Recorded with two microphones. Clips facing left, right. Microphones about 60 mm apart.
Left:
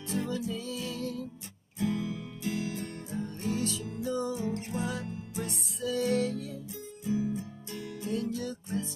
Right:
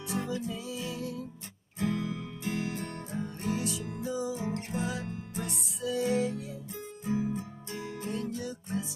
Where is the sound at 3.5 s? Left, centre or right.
Centre.